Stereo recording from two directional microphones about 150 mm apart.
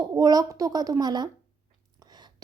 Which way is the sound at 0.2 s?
25° right (ahead or behind).